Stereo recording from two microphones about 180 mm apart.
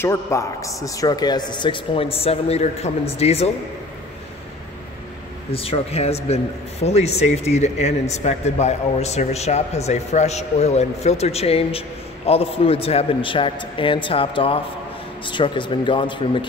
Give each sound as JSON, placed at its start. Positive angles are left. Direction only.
{"t": 0.0, "sound": "speech", "side_deg": 15}
{"t": 5.5, "sound": "speech", "side_deg": 30}